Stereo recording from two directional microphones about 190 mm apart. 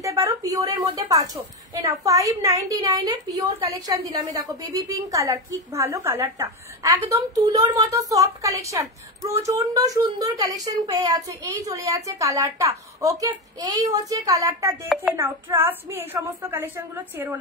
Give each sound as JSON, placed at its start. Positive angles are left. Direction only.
{"t": 0.0, "sound": "a woman's voice", "side_deg": -15}